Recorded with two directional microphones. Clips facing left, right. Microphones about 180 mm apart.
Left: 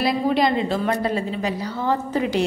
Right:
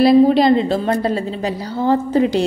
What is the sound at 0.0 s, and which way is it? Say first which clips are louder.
A woman's voice: right 9 dB; 30° right (ahead or behind).